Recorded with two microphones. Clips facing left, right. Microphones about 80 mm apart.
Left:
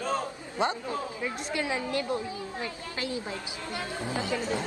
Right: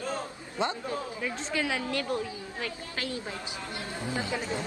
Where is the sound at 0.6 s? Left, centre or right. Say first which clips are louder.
Left 2 dB; left.